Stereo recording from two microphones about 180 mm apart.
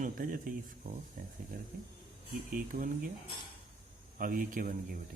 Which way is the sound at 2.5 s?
50° right (ahead or behind).